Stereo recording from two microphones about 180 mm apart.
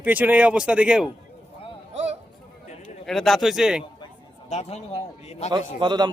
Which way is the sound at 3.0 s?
Centre (ahead or behind).